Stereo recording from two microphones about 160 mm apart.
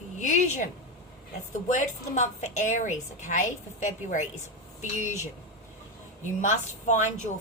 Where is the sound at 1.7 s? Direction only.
50° left (ahead or behind).